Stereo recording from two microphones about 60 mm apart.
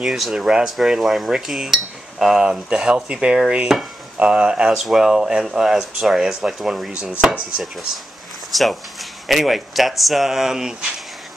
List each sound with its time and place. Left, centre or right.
0.0 s speech: centre
7.6 s speech: centre